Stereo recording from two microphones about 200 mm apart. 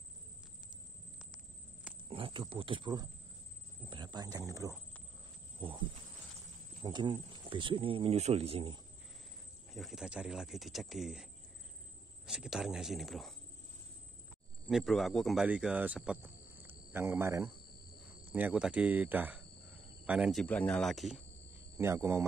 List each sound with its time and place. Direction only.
2.0 s speech: 25° right (ahead or behind)
6.8 s speech: 20° right (ahead or behind)
9.8 s speech: centre (ahead or behind)
12.3 s speech: 5° right (ahead or behind)
14.7 s speech: centre (ahead or behind)
21.7 s speech: 15° right (ahead or behind)